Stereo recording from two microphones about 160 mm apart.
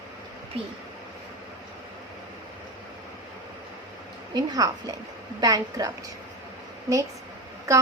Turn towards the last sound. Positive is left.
turn(degrees=-20)  # may be behind; listen again after turning